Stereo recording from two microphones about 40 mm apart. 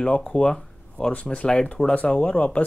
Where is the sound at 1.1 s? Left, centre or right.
Left.